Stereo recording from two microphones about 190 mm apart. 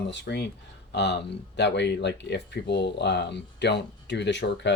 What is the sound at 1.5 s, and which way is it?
Speech, 65° left (ahead or behind).